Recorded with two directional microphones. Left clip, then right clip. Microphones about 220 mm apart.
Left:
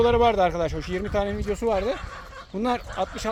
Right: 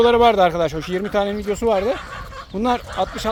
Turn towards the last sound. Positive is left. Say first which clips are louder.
# right 6 dB
turn(degrees=-5)  # may be behind; listen again after turning